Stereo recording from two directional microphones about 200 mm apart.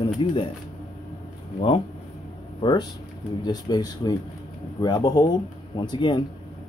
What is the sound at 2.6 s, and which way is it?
Speech, 20° left (ahead or behind).